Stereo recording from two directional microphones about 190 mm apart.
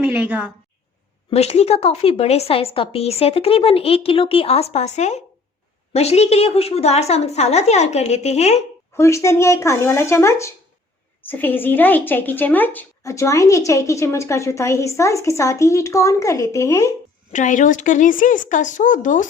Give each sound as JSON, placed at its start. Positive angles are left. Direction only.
{"t": 0.0, "sound": "a woman's voice", "side_deg": -5}
{"t": 1.3, "sound": "a woman's voice", "side_deg": 35}
{"t": 9.0, "sound": "a woman's voice", "side_deg": 15}
{"t": 17.3, "sound": "a woman's voice", "side_deg": 40}